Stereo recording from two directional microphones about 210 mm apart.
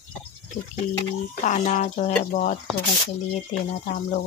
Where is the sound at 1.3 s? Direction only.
35° left (ahead or behind).